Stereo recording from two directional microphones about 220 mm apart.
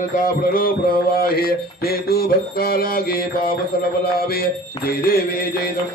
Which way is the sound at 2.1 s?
45° left (ahead or behind).